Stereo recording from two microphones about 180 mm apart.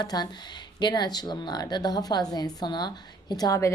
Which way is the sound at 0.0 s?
20° left (ahead or behind).